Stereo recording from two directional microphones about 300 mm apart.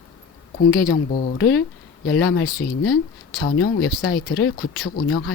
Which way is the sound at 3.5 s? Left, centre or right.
Left.